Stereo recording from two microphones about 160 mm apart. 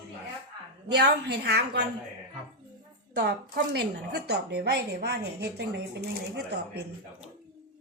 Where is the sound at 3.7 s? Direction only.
90° right.